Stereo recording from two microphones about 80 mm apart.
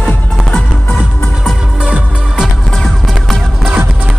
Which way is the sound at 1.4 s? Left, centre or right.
Centre.